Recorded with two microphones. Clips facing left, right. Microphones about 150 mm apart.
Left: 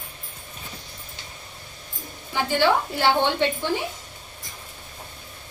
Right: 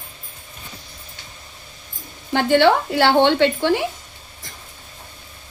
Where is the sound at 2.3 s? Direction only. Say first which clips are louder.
Right 6 dB; 70° right (ahead or behind).